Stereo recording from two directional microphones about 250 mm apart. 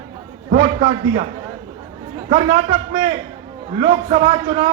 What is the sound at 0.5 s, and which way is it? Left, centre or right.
Speech, right.